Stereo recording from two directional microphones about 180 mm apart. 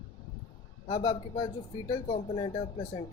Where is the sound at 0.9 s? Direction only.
25° left (ahead or behind).